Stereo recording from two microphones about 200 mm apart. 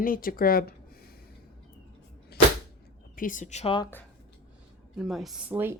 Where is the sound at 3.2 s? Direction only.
40° left (ahead or behind).